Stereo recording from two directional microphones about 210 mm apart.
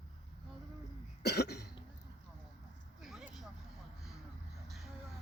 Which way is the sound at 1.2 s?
50° left (ahead or behind).